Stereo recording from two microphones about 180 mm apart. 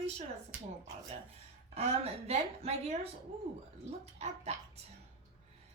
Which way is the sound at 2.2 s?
35° right (ahead or behind).